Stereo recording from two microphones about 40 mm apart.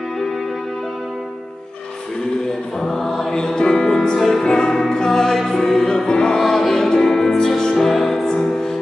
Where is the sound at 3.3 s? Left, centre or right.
Centre.